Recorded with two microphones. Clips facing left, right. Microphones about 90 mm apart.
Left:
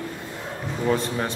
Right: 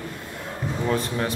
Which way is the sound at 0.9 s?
Centre (ahead or behind).